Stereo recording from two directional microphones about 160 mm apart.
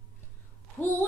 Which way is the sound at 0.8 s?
10° left (ahead or behind).